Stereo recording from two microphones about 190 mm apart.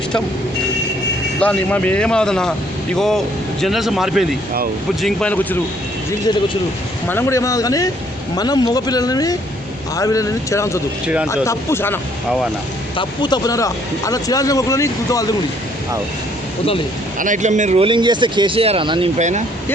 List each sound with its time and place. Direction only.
1.4 s speech: 10° left (ahead or behind)
7.1 s speech: 15° left (ahead or behind)
11.0 s speech: 5° right (ahead or behind)
11.4 s speech: 10° left (ahead or behind)
13.0 s speech: 20° left (ahead or behind)
17.2 s speech: 40° right (ahead or behind)